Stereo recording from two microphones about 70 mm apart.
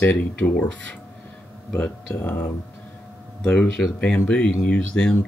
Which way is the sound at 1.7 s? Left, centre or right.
Left.